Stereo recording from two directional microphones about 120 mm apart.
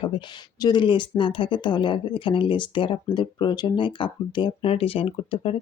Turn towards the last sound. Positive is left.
turn(degrees=50)  # may be behind; listen again after turning